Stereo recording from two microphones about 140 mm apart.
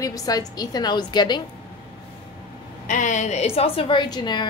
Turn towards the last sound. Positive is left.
turn(degrees=30)  # may be behind; listen again after turning